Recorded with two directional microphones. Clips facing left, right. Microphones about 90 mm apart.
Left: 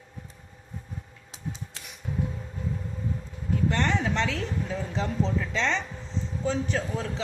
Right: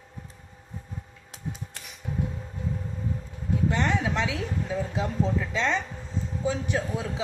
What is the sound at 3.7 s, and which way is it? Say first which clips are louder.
Speech: even; 10° right (ahead or behind).